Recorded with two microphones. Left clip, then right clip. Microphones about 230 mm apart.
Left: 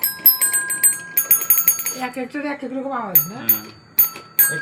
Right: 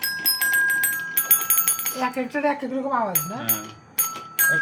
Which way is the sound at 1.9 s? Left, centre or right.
Right.